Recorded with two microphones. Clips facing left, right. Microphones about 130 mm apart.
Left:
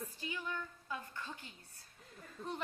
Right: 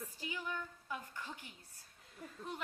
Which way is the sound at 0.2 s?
15° right (ahead or behind).